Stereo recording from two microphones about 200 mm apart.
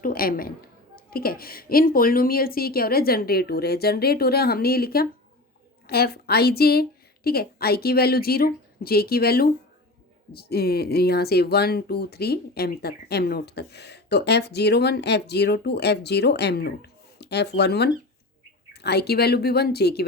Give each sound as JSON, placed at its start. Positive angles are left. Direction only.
{"t": 0.0, "sound": "a woman's voice", "side_deg": 50}